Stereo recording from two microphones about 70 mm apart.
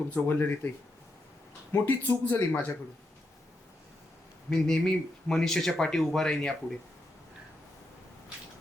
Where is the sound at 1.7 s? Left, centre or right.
Left.